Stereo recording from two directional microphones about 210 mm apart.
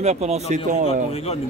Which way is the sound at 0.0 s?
30° right (ahead or behind).